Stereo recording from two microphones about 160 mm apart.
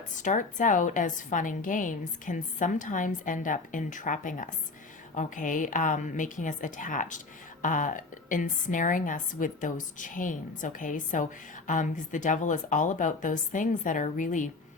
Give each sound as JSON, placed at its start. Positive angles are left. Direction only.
{"t": 0.2, "sound": "a woman's voice", "side_deg": 50}